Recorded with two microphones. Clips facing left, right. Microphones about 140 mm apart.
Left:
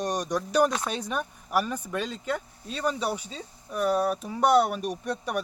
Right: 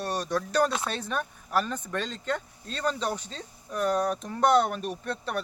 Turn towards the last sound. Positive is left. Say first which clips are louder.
# left 2 dB
turn(degrees=15)  # may be behind; listen again after turning